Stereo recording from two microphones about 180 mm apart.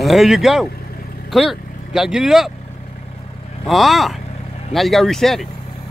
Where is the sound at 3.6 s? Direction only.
Centre (ahead or behind).